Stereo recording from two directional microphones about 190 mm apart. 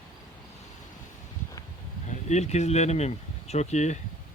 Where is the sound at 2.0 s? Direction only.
35° left (ahead or behind).